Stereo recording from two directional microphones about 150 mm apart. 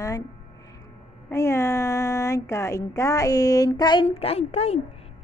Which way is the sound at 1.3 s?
20° left (ahead or behind).